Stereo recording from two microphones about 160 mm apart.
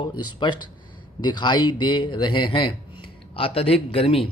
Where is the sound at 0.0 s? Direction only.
30° left (ahead or behind).